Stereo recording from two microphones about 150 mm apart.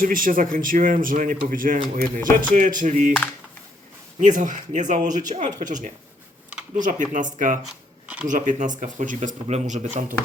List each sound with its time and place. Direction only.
0.0 s speech: 65° right (ahead or behind)
4.2 s speech: 60° right (ahead or behind)
8.0 s a sound: 5° right (ahead or behind)
8.3 s speech: 60° right (ahead or behind)